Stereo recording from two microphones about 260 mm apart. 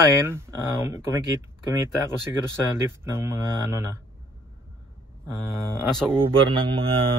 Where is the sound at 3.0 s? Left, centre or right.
Centre.